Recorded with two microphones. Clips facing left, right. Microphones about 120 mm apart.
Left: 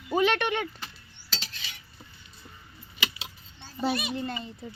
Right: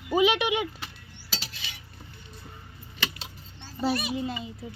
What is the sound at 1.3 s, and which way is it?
Cutlery, 5° right (ahead or behind).